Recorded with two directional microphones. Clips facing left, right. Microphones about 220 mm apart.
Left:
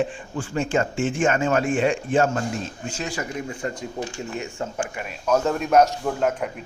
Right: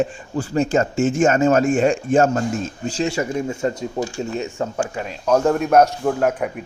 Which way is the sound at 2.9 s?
30° right (ahead or behind).